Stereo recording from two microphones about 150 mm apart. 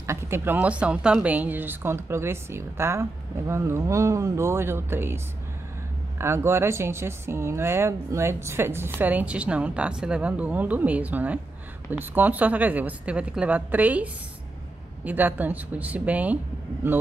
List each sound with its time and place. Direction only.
0.0 s a woman's voice: 20° right (ahead or behind)
0.6 s speech: 10° right (ahead or behind)